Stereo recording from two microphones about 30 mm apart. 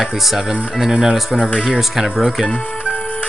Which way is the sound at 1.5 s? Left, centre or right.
Right.